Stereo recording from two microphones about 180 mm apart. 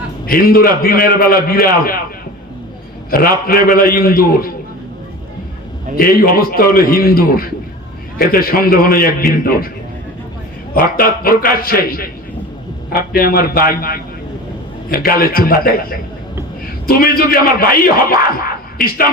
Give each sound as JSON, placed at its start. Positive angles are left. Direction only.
{"t": 0.3, "sound": "a man's voice", "side_deg": 55}
{"t": 3.1, "sound": "a man's voice", "side_deg": 55}
{"t": 6.0, "sound": "a man's voice", "side_deg": 55}
{"t": 10.8, "sound": "a man's voice", "side_deg": 55}